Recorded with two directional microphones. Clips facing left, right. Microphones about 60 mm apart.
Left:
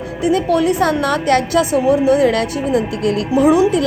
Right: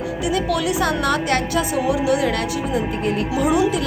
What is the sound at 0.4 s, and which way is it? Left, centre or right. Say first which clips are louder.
A woman's voice: left 5 dB; left.